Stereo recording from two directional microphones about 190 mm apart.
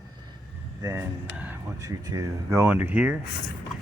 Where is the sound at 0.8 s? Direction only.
15° right (ahead or behind).